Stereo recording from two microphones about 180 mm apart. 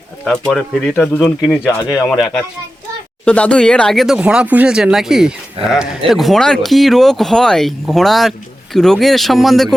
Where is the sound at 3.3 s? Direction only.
5° left (ahead or behind).